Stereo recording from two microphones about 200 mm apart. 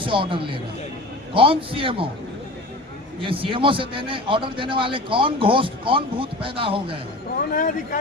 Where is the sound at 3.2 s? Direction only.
25° right (ahead or behind).